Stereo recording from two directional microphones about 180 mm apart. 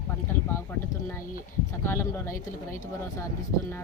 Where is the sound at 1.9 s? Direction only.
15° left (ahead or behind).